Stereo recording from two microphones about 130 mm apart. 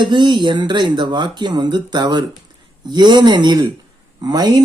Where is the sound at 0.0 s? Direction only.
35° right (ahead or behind).